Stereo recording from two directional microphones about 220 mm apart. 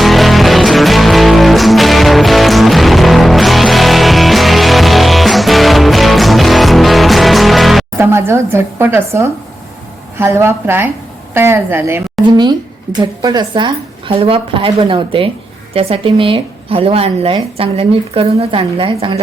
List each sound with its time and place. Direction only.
0.0 s music: centre (ahead or behind)
10.2 s a woman's voice: 10° right (ahead or behind)
13.2 s a woman's voice: 20° right (ahead or behind)